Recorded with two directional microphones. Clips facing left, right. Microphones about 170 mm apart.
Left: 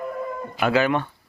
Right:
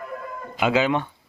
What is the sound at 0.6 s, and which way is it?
Speech, 15° right (ahead or behind).